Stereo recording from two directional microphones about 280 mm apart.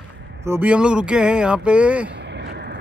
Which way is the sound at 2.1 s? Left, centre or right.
Right.